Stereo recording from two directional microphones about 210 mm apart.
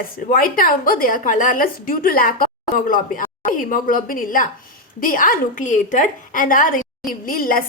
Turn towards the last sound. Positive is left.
turn(degrees=40)  # may be behind; listen again after turning